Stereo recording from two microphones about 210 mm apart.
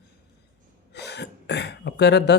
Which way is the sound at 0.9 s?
55° left (ahead or behind).